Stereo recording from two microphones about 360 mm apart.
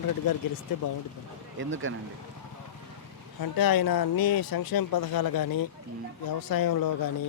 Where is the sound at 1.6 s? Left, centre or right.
Right.